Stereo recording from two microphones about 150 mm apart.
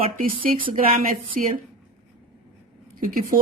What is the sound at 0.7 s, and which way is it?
Speech, 65° right (ahead or behind).